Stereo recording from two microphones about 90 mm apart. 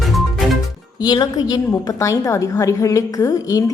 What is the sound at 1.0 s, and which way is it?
Speech, 50° left (ahead or behind).